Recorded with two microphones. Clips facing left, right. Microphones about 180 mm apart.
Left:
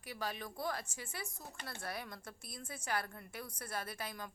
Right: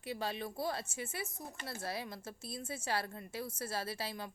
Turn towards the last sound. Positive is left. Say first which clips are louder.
# right 3 dB
turn(degrees=-25)  # may be behind; listen again after turning